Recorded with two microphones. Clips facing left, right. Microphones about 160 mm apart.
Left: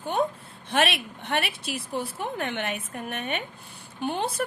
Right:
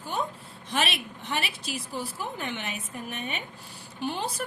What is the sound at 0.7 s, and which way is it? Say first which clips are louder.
A woman's voice: left 5 dB; 55° left (ahead or behind).